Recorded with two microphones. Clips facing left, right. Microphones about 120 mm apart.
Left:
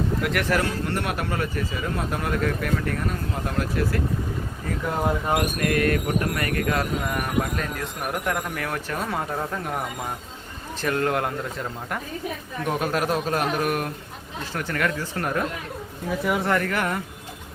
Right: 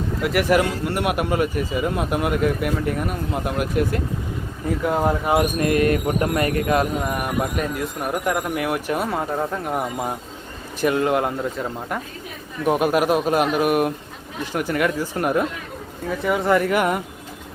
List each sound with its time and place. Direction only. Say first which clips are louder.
0.2 s speech: right 9 dB; 5° right (ahead or behind)
5.0 s speech: right 3 dB; 10° right (ahead or behind)
5.5 s speech: right 4 dB; 20° right (ahead or behind)
16.0 s speech: right 4 dB; centre (ahead or behind); by 17.0 s 15° right (ahead or behind)